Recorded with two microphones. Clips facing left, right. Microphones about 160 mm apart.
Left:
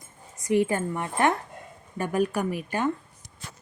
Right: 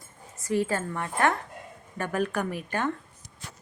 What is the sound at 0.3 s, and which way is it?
Speech, 15° left (ahead or behind).